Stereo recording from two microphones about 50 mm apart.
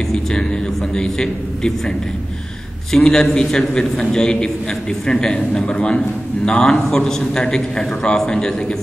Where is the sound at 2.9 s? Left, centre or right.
Centre; by 6.0 s left.